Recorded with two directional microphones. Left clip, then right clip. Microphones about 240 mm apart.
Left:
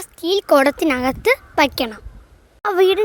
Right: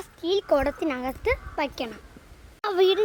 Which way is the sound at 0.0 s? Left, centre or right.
Left.